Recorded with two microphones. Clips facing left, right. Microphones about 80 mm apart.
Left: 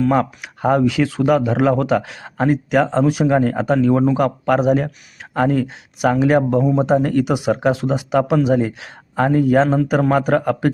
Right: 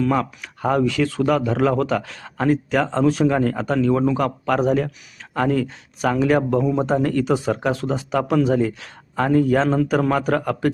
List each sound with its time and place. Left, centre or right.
0.0 s a man's voice: left; by 3.3 s centre
3.3 s a man's voice: left
10.1 s speech: left